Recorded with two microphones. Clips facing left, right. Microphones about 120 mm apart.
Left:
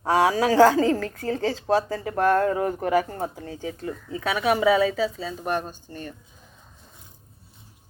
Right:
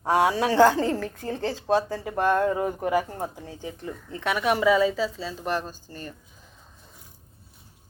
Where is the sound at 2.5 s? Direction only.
5° right (ahead or behind).